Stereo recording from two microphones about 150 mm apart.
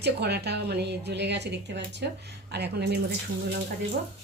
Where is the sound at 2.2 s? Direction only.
90° right.